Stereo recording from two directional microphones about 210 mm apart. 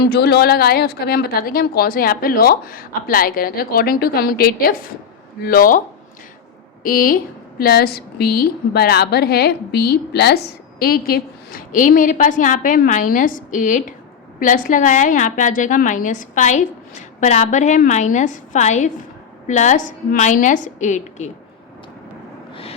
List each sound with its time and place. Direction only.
0.0 s a woman's voice: 50° left (ahead or behind)
6.8 s a woman's voice: 45° left (ahead or behind)